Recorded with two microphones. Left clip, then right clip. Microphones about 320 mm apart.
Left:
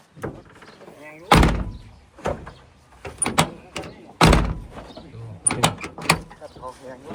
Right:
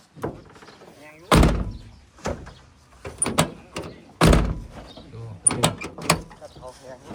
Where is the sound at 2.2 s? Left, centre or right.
Centre.